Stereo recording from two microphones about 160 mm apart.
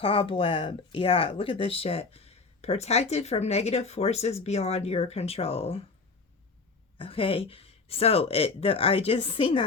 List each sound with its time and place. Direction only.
0.0 s speech: 35° left (ahead or behind)
7.0 s speech: 35° left (ahead or behind)